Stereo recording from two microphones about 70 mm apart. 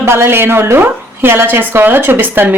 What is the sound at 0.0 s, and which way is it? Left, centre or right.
A woman's voice, right.